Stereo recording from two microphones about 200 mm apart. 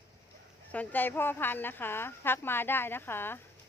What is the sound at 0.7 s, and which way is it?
Speech, 10° left (ahead or behind).